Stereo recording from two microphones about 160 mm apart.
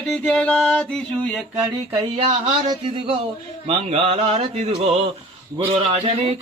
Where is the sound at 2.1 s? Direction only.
45° right (ahead or behind).